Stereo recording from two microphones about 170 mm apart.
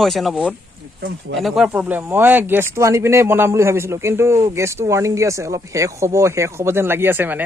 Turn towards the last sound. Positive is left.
turn(degrees=-10)  # may be behind; listen again after turning